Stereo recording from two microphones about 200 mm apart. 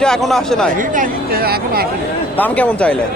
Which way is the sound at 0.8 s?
45° right (ahead or behind).